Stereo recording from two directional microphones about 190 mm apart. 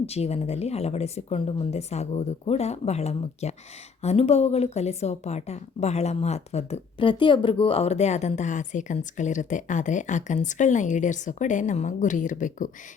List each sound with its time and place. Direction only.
0.0 s speech: 35° left (ahead or behind)